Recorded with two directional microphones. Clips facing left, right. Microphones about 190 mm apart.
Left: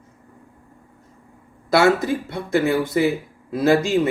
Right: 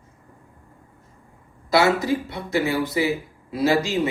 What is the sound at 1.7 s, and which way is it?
Speech, 50° left (ahead or behind).